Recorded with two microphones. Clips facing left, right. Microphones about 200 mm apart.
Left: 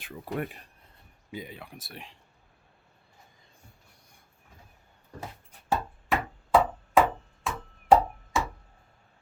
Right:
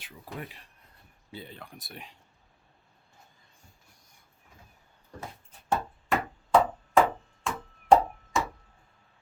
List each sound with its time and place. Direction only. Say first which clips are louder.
0.0 s speech: left 8 dB; 55° left (ahead or behind)
1.3 s speech: left 3 dB; 10° left (ahead or behind)
5.6 s a sound: even; centre (ahead or behind)
7.4 s chop: left 1 dB; centre (ahead or behind)